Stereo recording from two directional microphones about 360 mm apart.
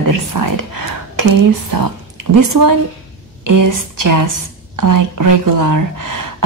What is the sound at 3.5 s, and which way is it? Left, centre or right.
Speech, right.